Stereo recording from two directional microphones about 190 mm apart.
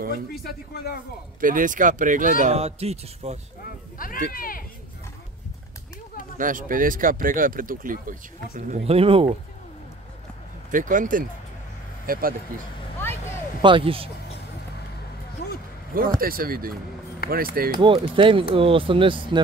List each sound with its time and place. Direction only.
0.3 s speech: 55° left (ahead or behind)
1.4 s speech: 45° right (ahead or behind)
4.3 s speech: 50° left (ahead or behind)
6.3 s speech: 45° right (ahead or behind); by 9.4 s 30° right (ahead or behind)
10.7 s speech: 45° right (ahead or behind)
13.6 s speech: 25° right (ahead or behind)
15.4 s a sound: 55° left (ahead or behind)
16.2 s speech: 50° right (ahead or behind)
17.7 s speech: 30° right (ahead or behind)